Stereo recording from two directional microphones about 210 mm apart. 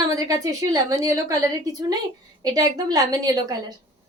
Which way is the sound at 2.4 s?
20° right (ahead or behind).